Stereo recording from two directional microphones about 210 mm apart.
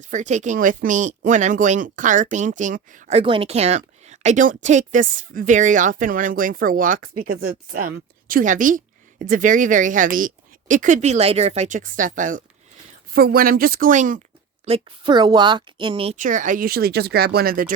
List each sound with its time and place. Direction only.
0.0 s speech: 35° right (ahead or behind)
14.6 s a woman's voice: 25° right (ahead or behind)
16.1 s speech: 40° right (ahead or behind)